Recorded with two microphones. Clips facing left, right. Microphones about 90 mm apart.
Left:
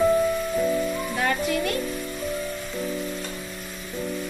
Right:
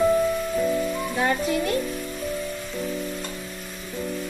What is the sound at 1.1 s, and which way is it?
Music, 20° right (ahead or behind).